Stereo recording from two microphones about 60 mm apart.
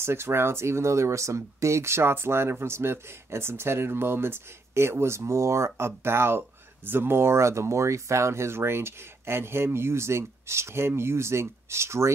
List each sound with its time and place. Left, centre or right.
0.0 s speech: right